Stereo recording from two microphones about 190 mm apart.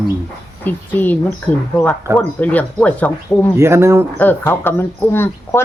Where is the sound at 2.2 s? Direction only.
10° left (ahead or behind).